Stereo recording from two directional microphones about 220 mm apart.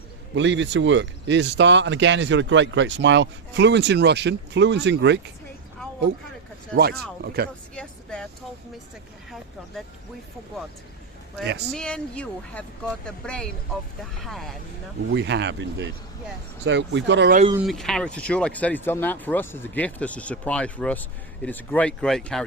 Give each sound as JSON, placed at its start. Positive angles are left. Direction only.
{"t": 0.3, "sound": "speech", "side_deg": -55}
{"t": 7.4, "sound": "speech", "side_deg": -45}
{"t": 7.8, "sound": "vehicle", "side_deg": 5}
{"t": 11.7, "sound": "speech", "side_deg": 5}
{"t": 15.1, "sound": "speech", "side_deg": -50}
{"t": 17.6, "sound": "speech", "side_deg": 0}